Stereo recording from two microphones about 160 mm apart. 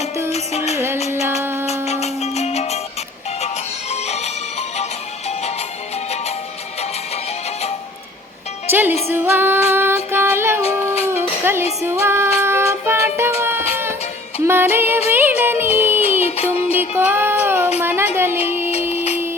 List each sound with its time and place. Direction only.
0.3 s music: 40° left (ahead or behind)
1.4 s music: 15° right (ahead or behind)
1.6 s music: 40° left (ahead or behind)
8.7 s speech: 10° right (ahead or behind)
9.0 s music: 15° right (ahead or behind)
11.9 s child singing: 15° right (ahead or behind)
13.4 s music: 15° right (ahead or behind)
16.2 s music: 40° left (ahead or behind)
16.9 s music: 10° right (ahead or behind)
17.7 s a sound: 10° right (ahead or behind)
18.8 s music: 10° right (ahead or behind)